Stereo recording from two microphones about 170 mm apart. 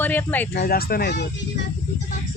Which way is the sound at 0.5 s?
65° left (ahead or behind).